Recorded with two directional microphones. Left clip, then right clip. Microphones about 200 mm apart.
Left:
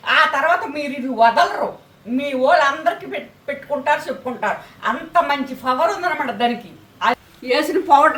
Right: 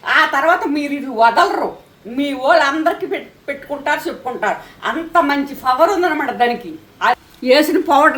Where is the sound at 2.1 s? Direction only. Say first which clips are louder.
Right 2 dB; 40° right (ahead or behind).